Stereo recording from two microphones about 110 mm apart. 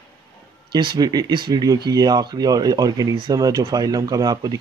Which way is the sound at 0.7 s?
45° right (ahead or behind).